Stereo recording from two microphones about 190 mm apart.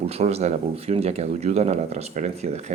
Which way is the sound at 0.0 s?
35° right (ahead or behind).